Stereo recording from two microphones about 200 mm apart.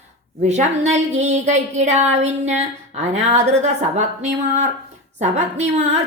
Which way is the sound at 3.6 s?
35° right (ahead or behind).